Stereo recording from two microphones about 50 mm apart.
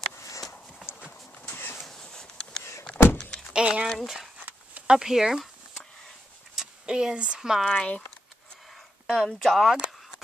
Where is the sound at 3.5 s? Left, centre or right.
Centre.